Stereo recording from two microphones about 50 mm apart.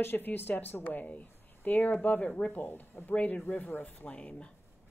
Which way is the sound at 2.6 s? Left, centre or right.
Left.